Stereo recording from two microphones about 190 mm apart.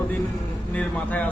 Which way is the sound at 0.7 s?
5° left (ahead or behind).